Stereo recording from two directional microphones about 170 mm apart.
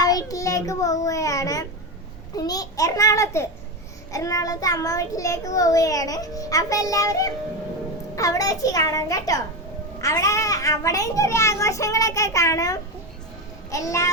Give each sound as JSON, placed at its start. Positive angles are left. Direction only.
{"t": 0.0, "sound": "a child's voice", "side_deg": 20}